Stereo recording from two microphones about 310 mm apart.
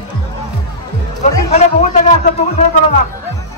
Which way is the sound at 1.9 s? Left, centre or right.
Left.